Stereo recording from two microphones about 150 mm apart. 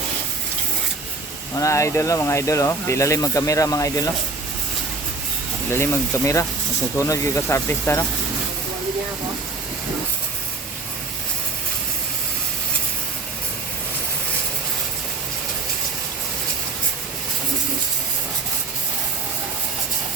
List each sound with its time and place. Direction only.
1.5 s speech: 20° left (ahead or behind)
5.7 s speech: 15° left (ahead or behind)